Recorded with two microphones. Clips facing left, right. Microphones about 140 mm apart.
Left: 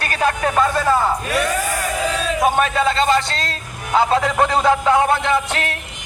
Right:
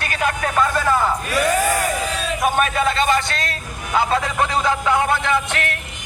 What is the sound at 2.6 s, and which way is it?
Speech, 30° left (ahead or behind).